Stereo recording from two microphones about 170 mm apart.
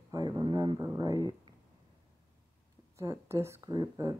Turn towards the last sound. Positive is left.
turn(degrees=-20)  # may be behind; listen again after turning